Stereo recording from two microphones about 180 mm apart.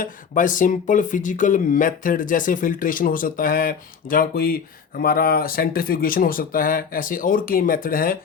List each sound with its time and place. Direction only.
0.0 s speech: 45° left (ahead or behind)